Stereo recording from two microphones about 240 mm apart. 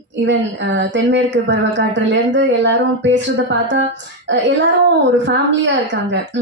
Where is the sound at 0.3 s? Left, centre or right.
Right.